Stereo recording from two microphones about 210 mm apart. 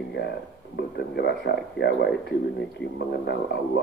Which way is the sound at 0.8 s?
50° left (ahead or behind).